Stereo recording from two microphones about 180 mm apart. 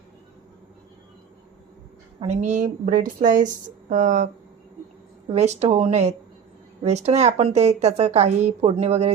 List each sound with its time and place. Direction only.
2.2 s speech: 40° right (ahead or behind)
5.3 s a woman's voice: 35° right (ahead or behind)